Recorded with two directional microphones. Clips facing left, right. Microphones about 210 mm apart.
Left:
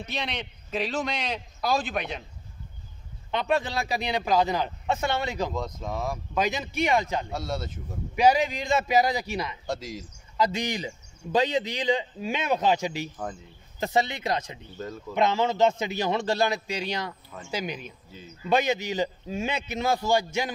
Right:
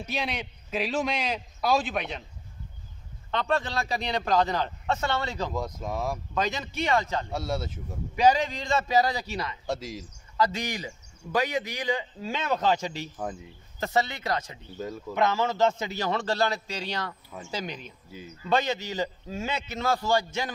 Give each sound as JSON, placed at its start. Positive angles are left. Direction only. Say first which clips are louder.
{"t": 0.0, "sound": "a man's voice", "louder": "right 1 dB", "side_deg": -5}
{"t": 3.3, "sound": "speech", "louder": "left 2 dB", "side_deg": 10}
{"t": 5.5, "sound": "speech", "louder": "even", "side_deg": -10}
{"t": 6.3, "sound": "speech", "louder": "left 5 dB", "side_deg": 10}
{"t": 7.2, "sound": "a man's voice", "louder": "right 1 dB", "side_deg": -5}
{"t": 8.2, "sound": "speech", "louder": "left 1 dB", "side_deg": 10}
{"t": 9.7, "sound": "a man's voice", "louder": "even", "side_deg": -5}
{"t": 10.3, "sound": "speech", "louder": "left 1 dB", "side_deg": 15}
{"t": 14.8, "sound": "speech", "louder": "right 2 dB", "side_deg": -10}
{"t": 15.1, "sound": "speech", "louder": "left 2 dB", "side_deg": 20}